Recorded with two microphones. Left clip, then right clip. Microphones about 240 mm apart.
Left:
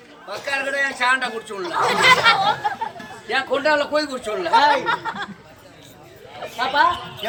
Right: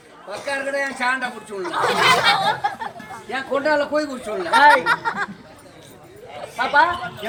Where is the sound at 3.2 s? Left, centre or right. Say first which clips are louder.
Left 2 dB; centre.